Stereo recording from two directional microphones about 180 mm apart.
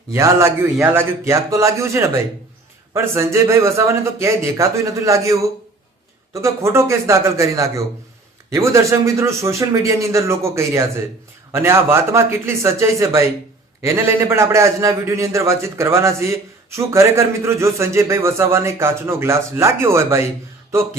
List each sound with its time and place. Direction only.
0.1 s a man's voice: 15° right (ahead or behind)